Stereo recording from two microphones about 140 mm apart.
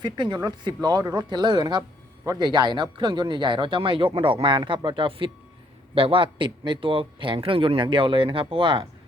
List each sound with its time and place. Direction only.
0.0 s speech: 30° right (ahead or behind)